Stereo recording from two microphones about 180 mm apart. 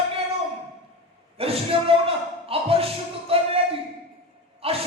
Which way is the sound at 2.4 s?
30° right (ahead or behind).